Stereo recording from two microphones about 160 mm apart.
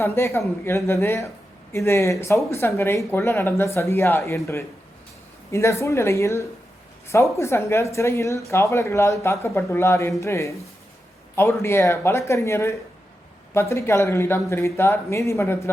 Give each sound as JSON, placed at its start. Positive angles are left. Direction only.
{"t": 0.0, "sound": "speech", "side_deg": 15}
{"t": 5.5, "sound": "speech", "side_deg": 15}